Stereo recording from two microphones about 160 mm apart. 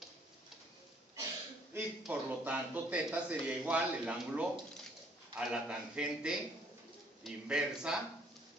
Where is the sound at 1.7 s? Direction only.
10° right (ahead or behind).